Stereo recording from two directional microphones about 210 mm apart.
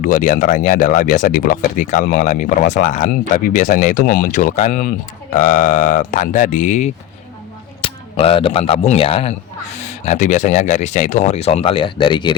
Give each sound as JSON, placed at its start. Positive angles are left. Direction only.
{"t": 0.0, "sound": "speech", "side_deg": 35}